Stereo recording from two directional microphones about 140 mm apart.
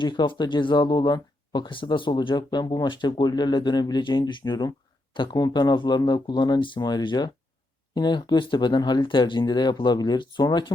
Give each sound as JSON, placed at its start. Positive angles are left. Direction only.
{"t": 0.0, "sound": "speech", "side_deg": 35}